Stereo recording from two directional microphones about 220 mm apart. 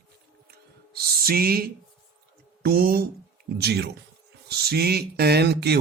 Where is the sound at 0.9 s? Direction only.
45° right (ahead or behind).